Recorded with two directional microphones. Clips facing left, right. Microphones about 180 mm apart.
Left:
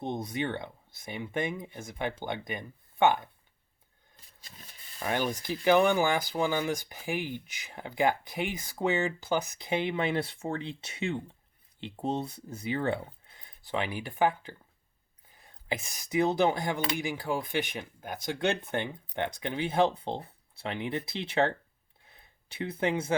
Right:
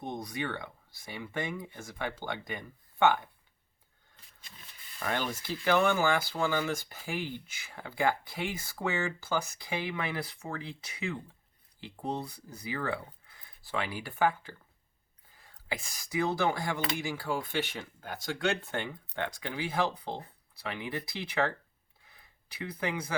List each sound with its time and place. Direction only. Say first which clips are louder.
0.0 s speech: left 4 dB; 25° left (ahead or behind)
4.9 s speech: left 3 dB; 15° left (ahead or behind)